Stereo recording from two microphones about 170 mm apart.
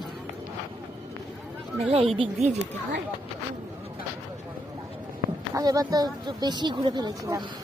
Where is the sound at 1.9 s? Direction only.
35° right (ahead or behind).